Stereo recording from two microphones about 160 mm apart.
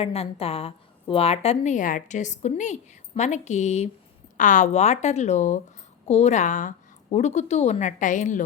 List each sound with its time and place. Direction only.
0.0 s a woman's voice: 40° left (ahead or behind)